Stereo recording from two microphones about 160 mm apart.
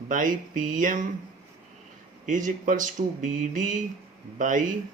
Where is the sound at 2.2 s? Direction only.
55° right (ahead or behind).